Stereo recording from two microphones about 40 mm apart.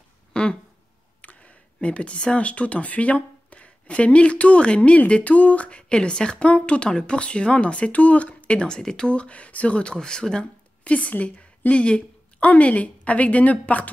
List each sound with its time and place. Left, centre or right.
0.3 s a sound: left
1.2 s speech: left
8.5 s speech: centre
10.8 s a woman's voice: left
11.7 s a woman's voice: left